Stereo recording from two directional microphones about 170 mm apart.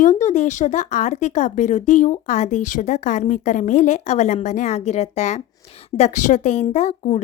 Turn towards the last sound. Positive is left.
turn(degrees=40)  # may be behind; listen again after turning